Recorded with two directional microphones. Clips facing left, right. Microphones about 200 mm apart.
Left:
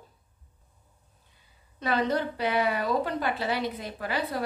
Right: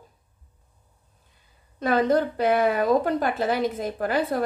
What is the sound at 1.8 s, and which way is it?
Speech, 50° right (ahead or behind).